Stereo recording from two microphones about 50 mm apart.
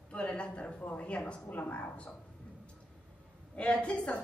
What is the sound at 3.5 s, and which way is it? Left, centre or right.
Speech, left.